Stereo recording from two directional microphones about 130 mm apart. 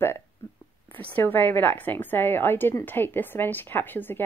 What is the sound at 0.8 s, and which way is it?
A woman's voice, 15° left (ahead or behind).